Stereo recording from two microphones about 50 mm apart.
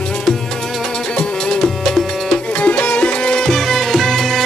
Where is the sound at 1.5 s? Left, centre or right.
Centre.